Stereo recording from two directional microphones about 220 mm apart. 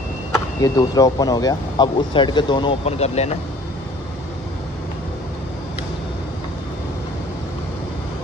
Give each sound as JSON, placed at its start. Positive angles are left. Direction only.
{"t": 0.3, "sound": "speech", "side_deg": 15}